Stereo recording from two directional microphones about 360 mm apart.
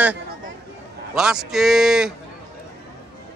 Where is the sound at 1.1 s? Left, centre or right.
Centre.